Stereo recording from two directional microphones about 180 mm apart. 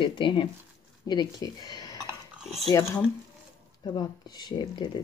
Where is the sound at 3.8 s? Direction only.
25° left (ahead or behind).